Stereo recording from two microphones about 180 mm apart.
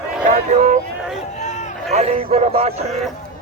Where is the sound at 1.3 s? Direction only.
40° left (ahead or behind).